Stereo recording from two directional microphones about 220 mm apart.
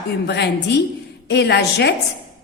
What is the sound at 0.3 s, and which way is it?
A woman's voice, 50° left (ahead or behind).